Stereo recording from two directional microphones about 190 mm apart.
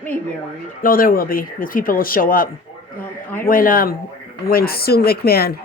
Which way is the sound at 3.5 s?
45° left (ahead or behind).